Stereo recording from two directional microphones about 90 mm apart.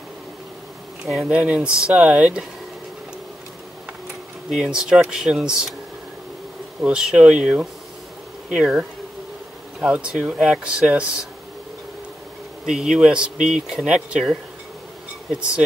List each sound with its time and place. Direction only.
1.2 s speech: 15° right (ahead or behind)
4.5 s speech: 5° right (ahead or behind)
6.8 s speech: 5° right (ahead or behind)
12.6 s speech: 5° right (ahead or behind)